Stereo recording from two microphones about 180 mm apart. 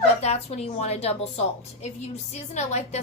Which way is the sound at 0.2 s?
35° left (ahead or behind).